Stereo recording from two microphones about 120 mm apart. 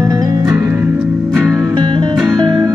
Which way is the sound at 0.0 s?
30° right (ahead or behind).